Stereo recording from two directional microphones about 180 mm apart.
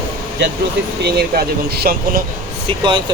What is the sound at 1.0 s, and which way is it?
Speech, 65° right (ahead or behind).